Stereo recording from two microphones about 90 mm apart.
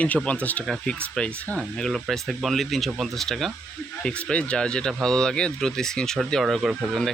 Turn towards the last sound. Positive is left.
turn(degrees=-5)  # may be behind; listen again after turning